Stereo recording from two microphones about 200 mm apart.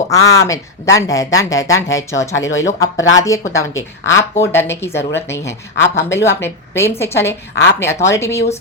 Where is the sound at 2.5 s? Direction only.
70° left (ahead or behind).